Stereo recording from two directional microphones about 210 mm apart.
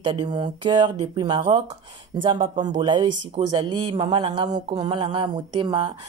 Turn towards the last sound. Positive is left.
turn(degrees=-20)  # may be behind; listen again after turning